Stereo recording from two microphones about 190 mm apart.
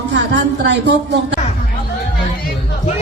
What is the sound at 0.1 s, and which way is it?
Speech, 70° right (ahead or behind).